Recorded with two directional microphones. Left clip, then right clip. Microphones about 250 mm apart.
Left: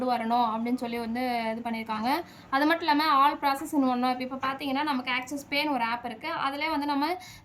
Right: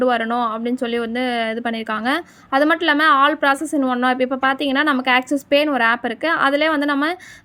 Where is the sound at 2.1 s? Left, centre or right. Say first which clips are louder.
Right 8 dB; centre.